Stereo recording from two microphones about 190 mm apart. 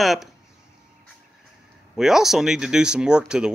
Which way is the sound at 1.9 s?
Centre (ahead or behind).